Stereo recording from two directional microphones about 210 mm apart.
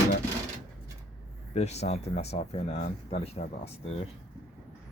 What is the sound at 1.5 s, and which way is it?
Speech, 30° left (ahead or behind).